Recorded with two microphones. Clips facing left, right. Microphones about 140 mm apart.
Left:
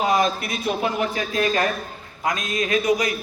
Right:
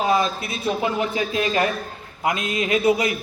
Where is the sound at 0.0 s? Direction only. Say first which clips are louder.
Even; 30° right (ahead or behind).